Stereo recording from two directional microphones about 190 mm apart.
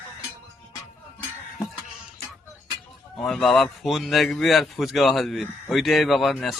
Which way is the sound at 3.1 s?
5° left (ahead or behind).